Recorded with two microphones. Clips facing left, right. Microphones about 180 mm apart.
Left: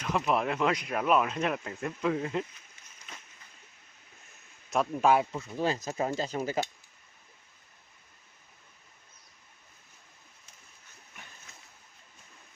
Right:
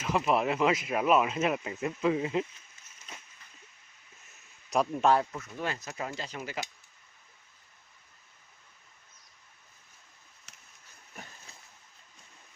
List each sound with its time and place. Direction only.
0.0 s speech: centre (ahead or behind)
4.7 s speech: centre (ahead or behind)
5.1 s speech: 25° left (ahead or behind)
10.5 s a sound: 75° right (ahead or behind)